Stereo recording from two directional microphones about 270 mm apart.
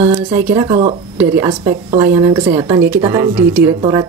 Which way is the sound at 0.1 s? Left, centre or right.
Centre.